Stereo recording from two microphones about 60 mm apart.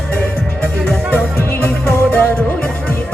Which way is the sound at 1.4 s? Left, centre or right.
Left.